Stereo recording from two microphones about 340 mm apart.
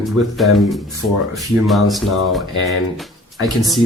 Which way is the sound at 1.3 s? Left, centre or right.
Centre.